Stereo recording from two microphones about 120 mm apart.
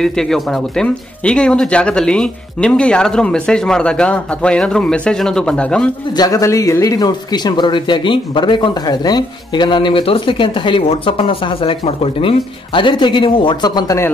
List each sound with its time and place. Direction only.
0.0 s speech: 5° left (ahead or behind)
6.1 s speech: 30° left (ahead or behind)